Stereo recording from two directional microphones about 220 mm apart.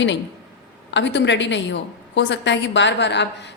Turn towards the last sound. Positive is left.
turn(degrees=55)  # may be behind; listen again after turning